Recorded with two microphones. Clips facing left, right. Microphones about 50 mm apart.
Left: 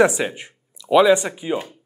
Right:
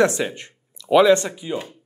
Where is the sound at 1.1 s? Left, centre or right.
Centre.